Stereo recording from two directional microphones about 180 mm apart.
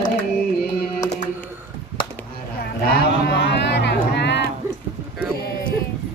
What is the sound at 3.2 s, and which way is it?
Music, 75° left (ahead or behind).